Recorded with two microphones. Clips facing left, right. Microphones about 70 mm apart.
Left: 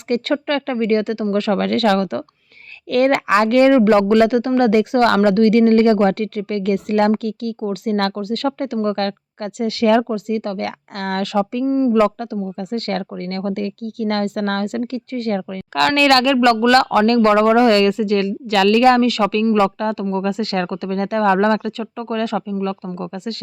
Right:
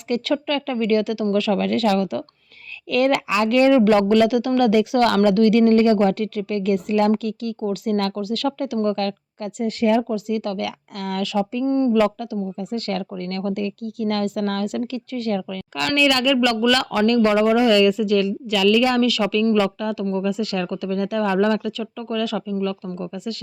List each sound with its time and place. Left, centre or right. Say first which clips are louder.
0.1 s speech: left 3 dB; left
8.1 s speech: left 2 dB; left
9.6 s speech: left 4 dB; left
10.1 s speech: left 2 dB; left
11.6 s speech: left 2 dB; centre
12.5 s speech: left 3 dB; left
16.0 s speech: left 3 dB; left
23.0 s speech: left 2 dB; left